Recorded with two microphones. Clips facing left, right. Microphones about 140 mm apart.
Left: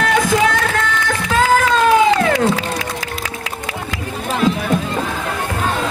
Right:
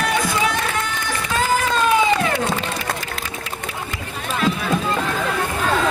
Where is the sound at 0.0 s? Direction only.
90° left.